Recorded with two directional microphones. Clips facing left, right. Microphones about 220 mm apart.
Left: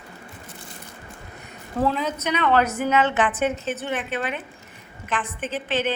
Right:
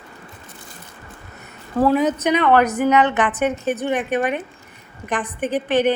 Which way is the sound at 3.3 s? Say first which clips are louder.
Right 3 dB; 60° right (ahead or behind).